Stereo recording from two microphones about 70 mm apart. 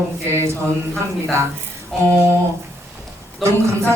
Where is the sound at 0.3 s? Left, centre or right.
Right.